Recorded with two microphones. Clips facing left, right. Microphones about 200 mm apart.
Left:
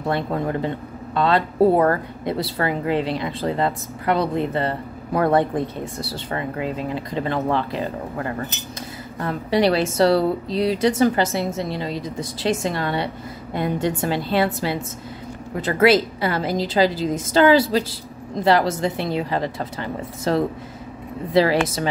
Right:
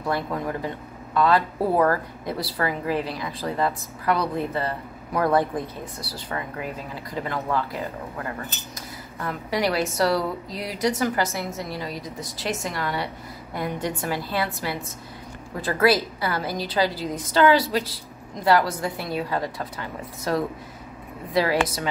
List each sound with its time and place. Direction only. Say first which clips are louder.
0.0 s speech: left 4 dB; 25° left (ahead or behind)